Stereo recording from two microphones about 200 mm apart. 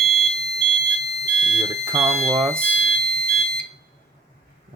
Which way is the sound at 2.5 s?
5° left (ahead or behind).